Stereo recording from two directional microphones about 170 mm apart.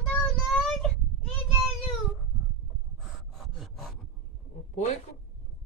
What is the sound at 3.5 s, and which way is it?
Filing, centre (ahead or behind).